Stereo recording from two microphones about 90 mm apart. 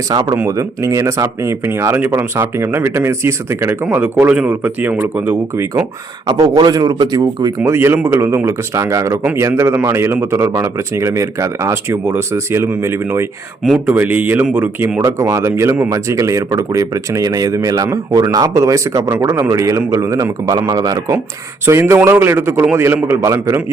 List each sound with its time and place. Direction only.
0.1 s speech: 50° right (ahead or behind)
0.4 s speech: 35° right (ahead or behind)
6.4 s speech: 50° right (ahead or behind)
7.6 s speech: 30° right (ahead or behind)
13.7 s speech: 20° right (ahead or behind)
15.0 s speech: 35° right (ahead or behind)
21.7 s speech: 30° right (ahead or behind)